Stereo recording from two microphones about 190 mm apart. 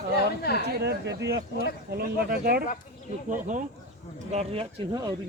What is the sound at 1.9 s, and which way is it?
Speech, 55° right (ahead or behind).